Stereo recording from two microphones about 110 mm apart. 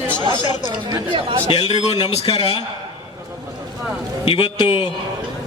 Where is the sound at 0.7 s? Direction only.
35° right (ahead or behind).